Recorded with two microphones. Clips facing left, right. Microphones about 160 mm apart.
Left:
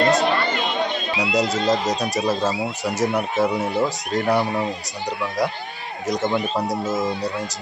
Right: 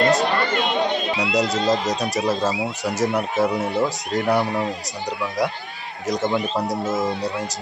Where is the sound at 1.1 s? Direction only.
Centre (ahead or behind).